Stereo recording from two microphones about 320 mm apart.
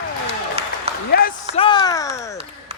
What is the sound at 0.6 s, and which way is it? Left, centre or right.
Applause, centre.